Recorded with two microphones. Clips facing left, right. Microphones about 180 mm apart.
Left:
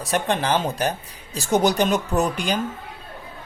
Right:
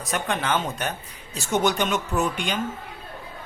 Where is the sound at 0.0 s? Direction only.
35° left (ahead or behind).